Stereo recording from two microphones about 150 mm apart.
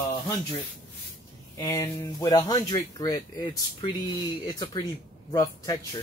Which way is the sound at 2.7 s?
25° left (ahead or behind).